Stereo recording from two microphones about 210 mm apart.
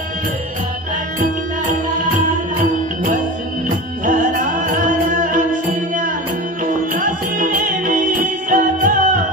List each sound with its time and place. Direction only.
2.6 s music: 40° right (ahead or behind)